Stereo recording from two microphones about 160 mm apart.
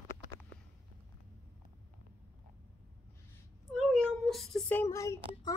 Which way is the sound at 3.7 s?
Centre (ahead or behind).